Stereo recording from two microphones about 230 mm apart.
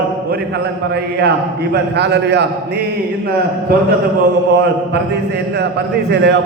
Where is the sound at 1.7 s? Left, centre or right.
Right.